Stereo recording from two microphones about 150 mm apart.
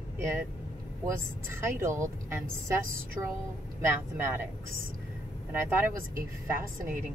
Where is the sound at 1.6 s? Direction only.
20° right (ahead or behind).